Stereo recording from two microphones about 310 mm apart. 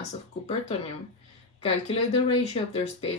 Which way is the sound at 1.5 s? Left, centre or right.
Centre.